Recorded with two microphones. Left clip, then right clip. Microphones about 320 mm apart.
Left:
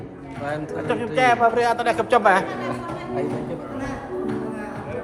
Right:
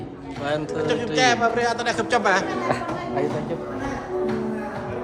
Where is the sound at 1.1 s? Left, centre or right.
Left.